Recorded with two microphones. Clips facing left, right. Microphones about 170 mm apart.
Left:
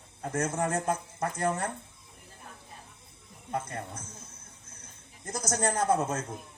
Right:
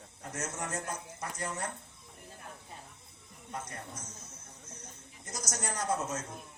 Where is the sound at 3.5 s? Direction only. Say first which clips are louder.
Left 7 dB; 55° left (ahead or behind).